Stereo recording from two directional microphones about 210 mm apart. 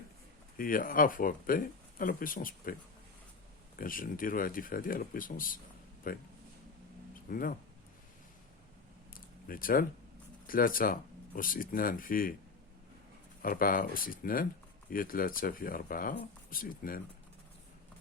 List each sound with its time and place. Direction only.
0.5 s speech: 40° left (ahead or behind)
3.8 s speech: 40° left (ahead or behind)
7.3 s speech: 40° left (ahead or behind)
9.1 s a sound: 40° left (ahead or behind)
10.4 s speech: 40° left (ahead or behind)
13.4 s speech: 45° left (ahead or behind)